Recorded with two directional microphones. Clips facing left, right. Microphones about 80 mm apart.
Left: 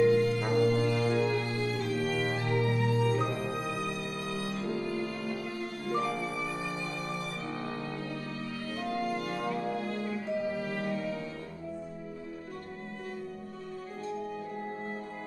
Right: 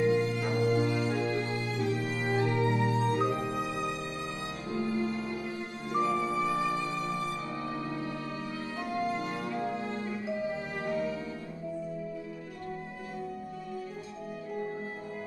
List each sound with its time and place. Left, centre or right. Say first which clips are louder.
0.0 s music: left 3 dB; right
4.7 s music: right 2 dB; right
8.9 s music: right 2 dB; right